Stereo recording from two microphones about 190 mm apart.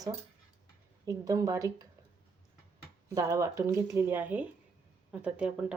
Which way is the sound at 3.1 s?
20° right (ahead or behind).